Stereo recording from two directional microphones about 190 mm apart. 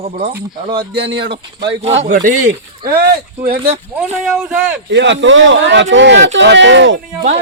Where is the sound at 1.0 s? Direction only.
60° right (ahead or behind).